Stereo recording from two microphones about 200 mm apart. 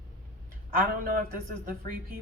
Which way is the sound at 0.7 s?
45° right (ahead or behind).